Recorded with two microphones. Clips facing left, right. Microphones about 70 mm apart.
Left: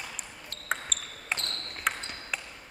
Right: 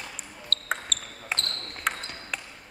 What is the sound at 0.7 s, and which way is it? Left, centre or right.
Basketball bounce, centre.